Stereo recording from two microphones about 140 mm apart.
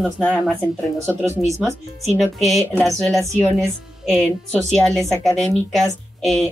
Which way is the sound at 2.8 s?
Centre (ahead or behind).